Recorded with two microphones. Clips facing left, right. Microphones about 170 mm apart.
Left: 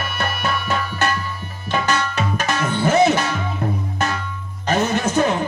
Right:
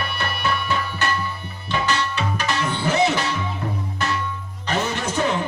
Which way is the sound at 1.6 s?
45° left (ahead or behind).